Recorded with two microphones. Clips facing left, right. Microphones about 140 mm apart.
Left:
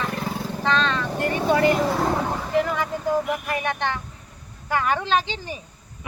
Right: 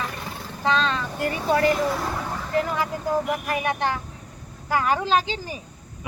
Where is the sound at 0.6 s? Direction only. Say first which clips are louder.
Even; 5° right (ahead or behind).